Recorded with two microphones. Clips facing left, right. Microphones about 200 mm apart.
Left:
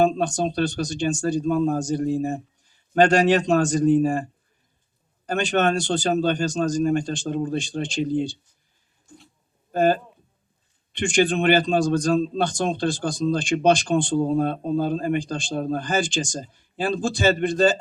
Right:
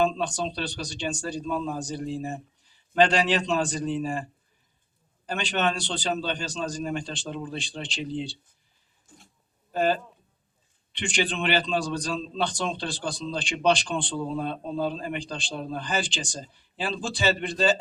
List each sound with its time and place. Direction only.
0.0 s a man's voice: 45° left (ahead or behind)
9.7 s a man's voice: 45° left (ahead or behind)